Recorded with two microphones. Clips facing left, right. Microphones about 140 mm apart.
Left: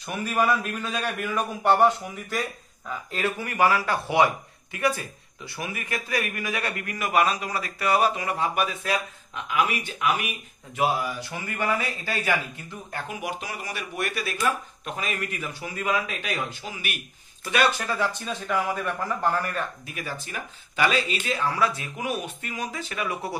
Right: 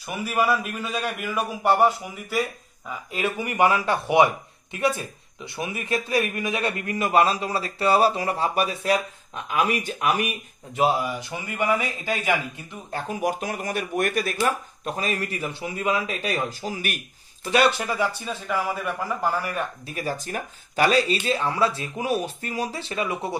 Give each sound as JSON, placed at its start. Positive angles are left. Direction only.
{"t": 0.0, "sound": "a man's voice", "side_deg": -5}
{"t": 10.8, "sound": "a man's voice", "side_deg": -20}
{"t": 12.9, "sound": "speech", "side_deg": -40}
{"t": 14.4, "sound": "speech", "side_deg": -35}
{"t": 17.8, "sound": "a man's voice", "side_deg": -10}
{"t": 19.9, "sound": "speech", "side_deg": -40}